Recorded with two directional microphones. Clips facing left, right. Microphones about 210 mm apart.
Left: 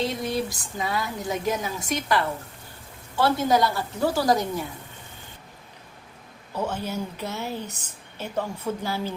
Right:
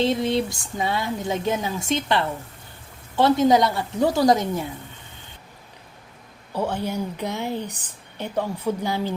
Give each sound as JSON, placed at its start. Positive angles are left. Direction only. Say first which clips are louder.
{"t": 0.0, "sound": "speech", "louder": "right 5 dB", "side_deg": -25}
{"t": 6.5, "sound": "speech", "louder": "right 3 dB", "side_deg": -15}